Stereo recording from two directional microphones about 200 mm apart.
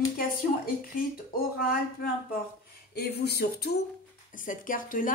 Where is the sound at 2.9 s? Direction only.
55° left (ahead or behind).